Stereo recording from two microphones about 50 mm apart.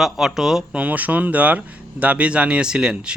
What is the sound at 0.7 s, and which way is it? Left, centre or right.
Speech, right.